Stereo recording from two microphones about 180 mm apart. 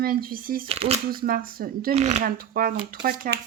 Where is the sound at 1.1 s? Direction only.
55° right (ahead or behind).